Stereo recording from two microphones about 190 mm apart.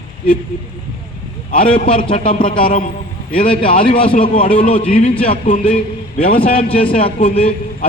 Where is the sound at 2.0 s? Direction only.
30° left (ahead or behind).